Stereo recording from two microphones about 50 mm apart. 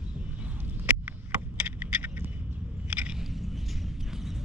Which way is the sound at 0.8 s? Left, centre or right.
Right.